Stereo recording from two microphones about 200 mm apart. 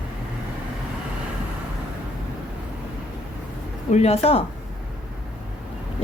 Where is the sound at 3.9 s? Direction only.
30° left (ahead or behind).